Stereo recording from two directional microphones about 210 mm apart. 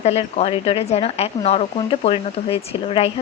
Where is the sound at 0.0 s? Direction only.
30° left (ahead or behind).